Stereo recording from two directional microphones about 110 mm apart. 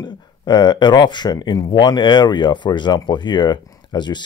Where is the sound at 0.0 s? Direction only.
40° left (ahead or behind).